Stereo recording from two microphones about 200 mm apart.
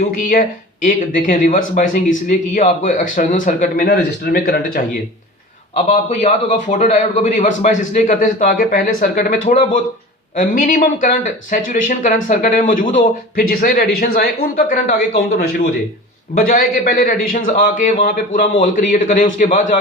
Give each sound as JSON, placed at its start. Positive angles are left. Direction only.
{"t": 0.1, "sound": "a man's voice", "side_deg": 45}
{"t": 3.8, "sound": "speech", "side_deg": 55}
{"t": 5.7, "sound": "a man's voice", "side_deg": 35}
{"t": 16.4, "sound": "a man's voice", "side_deg": 45}